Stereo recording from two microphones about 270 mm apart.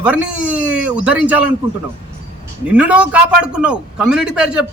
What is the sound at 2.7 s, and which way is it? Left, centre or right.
A man's voice, centre.